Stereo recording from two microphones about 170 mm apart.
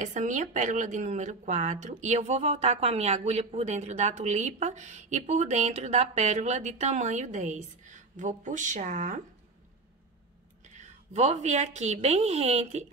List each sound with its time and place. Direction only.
0.0 s a woman's voice: 45° right (ahead or behind)
10.8 s speech: 40° right (ahead or behind)